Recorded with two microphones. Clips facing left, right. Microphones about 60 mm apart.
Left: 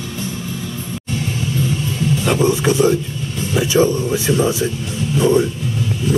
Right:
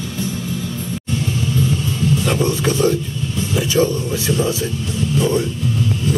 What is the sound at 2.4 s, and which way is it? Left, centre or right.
Speech, centre.